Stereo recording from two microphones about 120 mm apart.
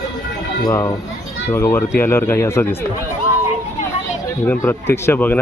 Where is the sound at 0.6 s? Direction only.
30° left (ahead or behind).